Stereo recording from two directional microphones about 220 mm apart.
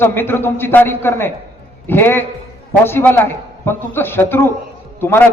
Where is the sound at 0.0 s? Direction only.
10° left (ahead or behind).